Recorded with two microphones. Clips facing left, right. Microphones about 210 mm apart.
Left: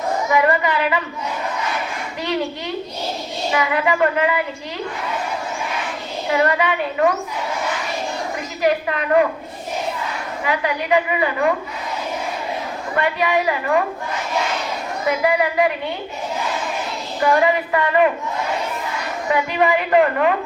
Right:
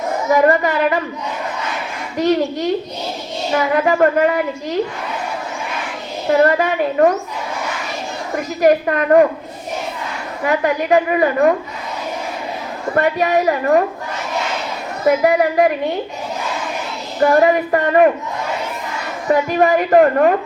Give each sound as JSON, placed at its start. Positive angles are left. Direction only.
{"t": 0.3, "sound": "a woman's voice", "side_deg": -45}
{"t": 2.1, "sound": "a woman's voice", "side_deg": -45}
{"t": 6.2, "sound": "a woman's voice", "side_deg": -45}
{"t": 8.6, "sound": "a woman's voice", "side_deg": -45}
{"t": 10.4, "sound": "a woman's voice", "side_deg": -45}
{"t": 13.0, "sound": "a woman's voice", "side_deg": -45}
{"t": 15.0, "sound": "a woman's voice", "side_deg": -45}
{"t": 17.2, "sound": "a woman's voice", "side_deg": -45}
{"t": 19.3, "sound": "a woman's voice", "side_deg": -45}